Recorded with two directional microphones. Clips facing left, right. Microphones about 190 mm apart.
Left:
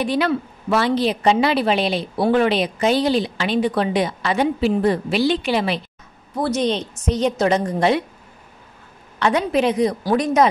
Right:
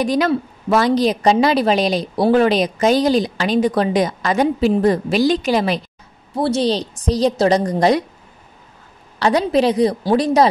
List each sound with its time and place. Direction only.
0.0 s a woman's voice: 40° right (ahead or behind)
6.3 s a woman's voice: 30° right (ahead or behind)
9.2 s a woman's voice: 35° right (ahead or behind)